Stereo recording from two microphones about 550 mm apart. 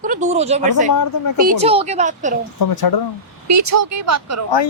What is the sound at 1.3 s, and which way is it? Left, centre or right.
Speech, centre.